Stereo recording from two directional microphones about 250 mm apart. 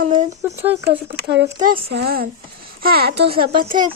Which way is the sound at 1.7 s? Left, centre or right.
Right.